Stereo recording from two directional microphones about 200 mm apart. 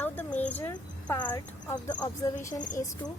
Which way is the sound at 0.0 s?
10° left (ahead or behind).